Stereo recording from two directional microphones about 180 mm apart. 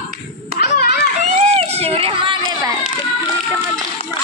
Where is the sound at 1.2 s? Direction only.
40° right (ahead or behind).